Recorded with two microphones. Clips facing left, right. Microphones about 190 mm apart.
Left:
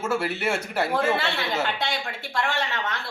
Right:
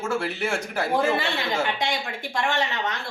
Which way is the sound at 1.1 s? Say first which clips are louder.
Right 1 dB; 15° right (ahead or behind).